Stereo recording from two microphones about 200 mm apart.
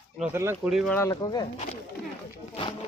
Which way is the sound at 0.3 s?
10° right (ahead or behind).